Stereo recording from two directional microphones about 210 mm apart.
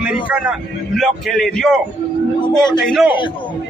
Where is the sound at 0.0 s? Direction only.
5° right (ahead or behind).